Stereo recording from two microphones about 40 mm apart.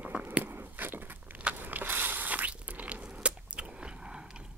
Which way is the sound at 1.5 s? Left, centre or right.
Right.